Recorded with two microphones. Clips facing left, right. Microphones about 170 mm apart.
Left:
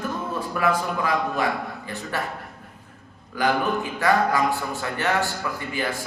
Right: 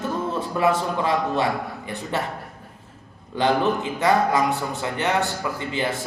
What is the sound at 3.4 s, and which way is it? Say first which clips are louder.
Speech: right 2 dB; 25° right (ahead or behind).